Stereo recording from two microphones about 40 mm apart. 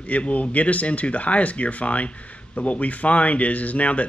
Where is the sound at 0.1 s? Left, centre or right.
Left.